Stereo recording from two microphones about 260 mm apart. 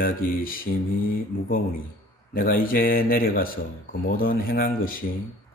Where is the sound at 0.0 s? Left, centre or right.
Left.